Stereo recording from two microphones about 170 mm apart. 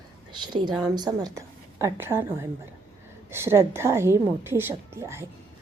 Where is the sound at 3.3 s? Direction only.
15° right (ahead or behind).